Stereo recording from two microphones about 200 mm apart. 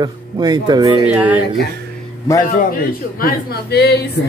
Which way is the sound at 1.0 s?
5° right (ahead or behind).